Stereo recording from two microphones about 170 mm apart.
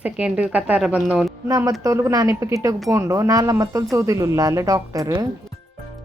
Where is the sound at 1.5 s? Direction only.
20° right (ahead or behind).